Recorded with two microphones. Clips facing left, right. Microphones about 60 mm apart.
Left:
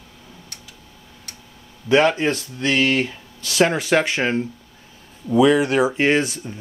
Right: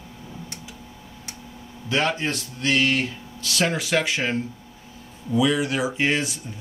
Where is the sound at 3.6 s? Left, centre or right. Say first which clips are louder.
Left 6 dB; left.